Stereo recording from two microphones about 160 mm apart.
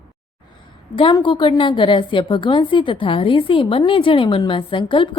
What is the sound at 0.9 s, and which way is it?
A woman's voice, 30° left (ahead or behind).